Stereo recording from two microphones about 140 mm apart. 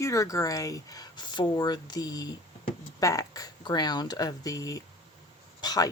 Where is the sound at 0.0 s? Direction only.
20° left (ahead or behind).